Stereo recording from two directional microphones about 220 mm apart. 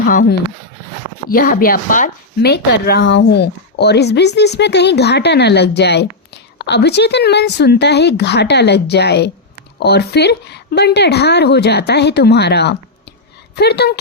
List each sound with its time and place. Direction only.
0.0 s a woman's voice: 40° left (ahead or behind)